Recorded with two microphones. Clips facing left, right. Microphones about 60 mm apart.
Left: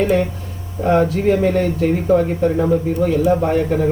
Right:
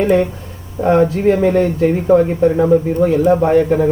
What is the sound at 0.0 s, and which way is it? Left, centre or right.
Speech, right.